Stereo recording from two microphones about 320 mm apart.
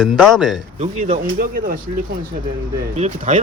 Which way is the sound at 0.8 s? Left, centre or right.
Centre.